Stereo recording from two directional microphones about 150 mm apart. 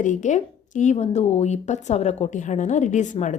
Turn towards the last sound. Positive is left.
turn(degrees=55)  # may be behind; listen again after turning